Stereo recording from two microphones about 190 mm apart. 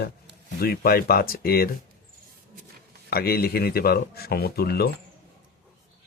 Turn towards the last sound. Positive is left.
turn(degrees=55)  # may be behind; listen again after turning